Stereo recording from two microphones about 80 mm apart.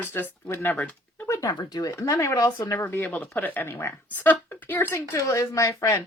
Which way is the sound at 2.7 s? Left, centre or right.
Left.